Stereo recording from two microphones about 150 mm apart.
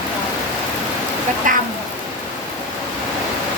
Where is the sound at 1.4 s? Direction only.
60° right (ahead or behind).